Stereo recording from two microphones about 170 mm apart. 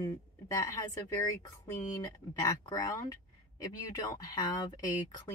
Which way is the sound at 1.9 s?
20° left (ahead or behind).